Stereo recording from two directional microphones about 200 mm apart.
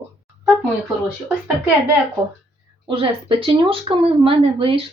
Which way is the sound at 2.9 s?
25° right (ahead or behind).